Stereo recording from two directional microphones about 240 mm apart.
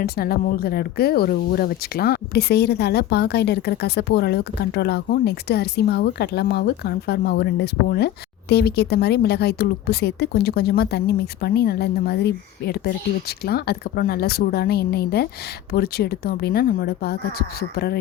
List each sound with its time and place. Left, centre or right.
0.0 s speech: left